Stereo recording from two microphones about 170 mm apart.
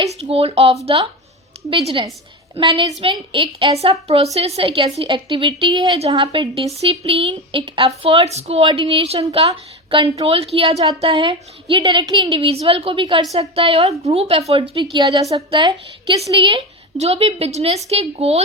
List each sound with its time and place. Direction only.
0.1 s a woman's voice: 35° right (ahead or behind)